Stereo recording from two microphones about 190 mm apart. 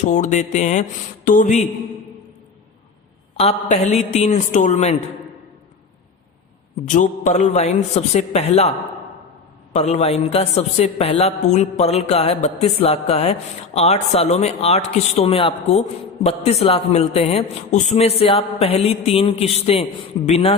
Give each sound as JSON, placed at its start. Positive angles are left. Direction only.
{"t": 0.1, "sound": "a man's voice", "side_deg": 40}
{"t": 3.3, "sound": "a man's voice", "side_deg": 35}
{"t": 6.8, "sound": "a man's voice", "side_deg": 40}
{"t": 9.7, "sound": "a man's voice", "side_deg": 35}